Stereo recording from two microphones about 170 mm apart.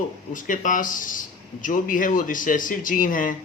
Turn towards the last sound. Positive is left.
turn(degrees=50)  # may be behind; listen again after turning